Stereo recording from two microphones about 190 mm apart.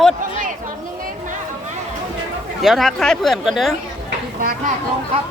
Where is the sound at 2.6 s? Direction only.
Centre (ahead or behind).